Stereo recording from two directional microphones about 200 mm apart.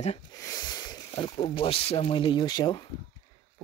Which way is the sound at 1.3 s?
25° left (ahead or behind).